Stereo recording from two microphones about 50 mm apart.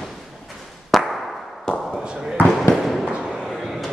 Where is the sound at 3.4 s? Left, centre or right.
Centre.